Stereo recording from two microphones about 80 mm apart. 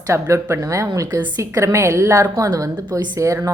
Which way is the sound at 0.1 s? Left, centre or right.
Right.